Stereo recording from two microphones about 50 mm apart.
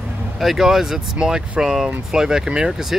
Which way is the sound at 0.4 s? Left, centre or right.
Centre.